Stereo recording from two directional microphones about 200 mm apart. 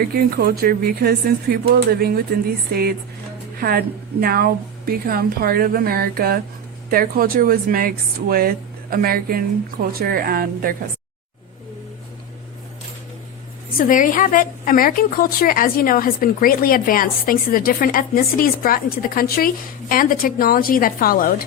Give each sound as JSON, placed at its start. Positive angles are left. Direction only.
{"t": 0.1, "sound": "speech", "side_deg": -50}
{"t": 3.6, "sound": "speech", "side_deg": -50}
{"t": 13.7, "sound": "a woman's voice", "side_deg": 45}